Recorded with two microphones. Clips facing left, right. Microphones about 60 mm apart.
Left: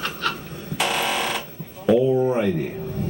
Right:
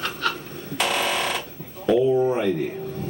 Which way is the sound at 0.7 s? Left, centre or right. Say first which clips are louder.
Even; centre.